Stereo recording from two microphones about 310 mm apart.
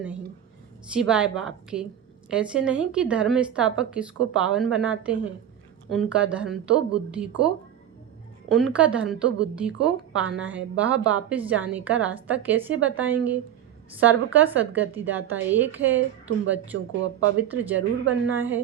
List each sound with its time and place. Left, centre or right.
0.9 s speech: centre
16.7 s speech: right
17.6 s speech: centre
18.0 s speech: right